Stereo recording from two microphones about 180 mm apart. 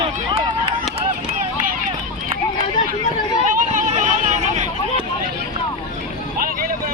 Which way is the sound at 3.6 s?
45° right (ahead or behind).